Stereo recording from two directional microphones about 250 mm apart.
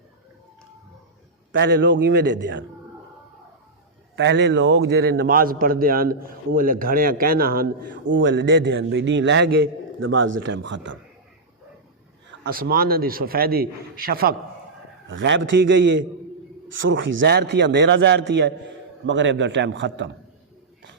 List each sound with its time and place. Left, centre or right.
1.5 s a man's voice: right
4.1 s a man's voice: right
8.1 s a man's voice: right
12.4 s a man's voice: right